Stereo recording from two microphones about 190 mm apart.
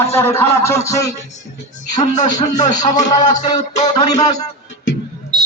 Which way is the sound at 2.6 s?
40° left (ahead or behind).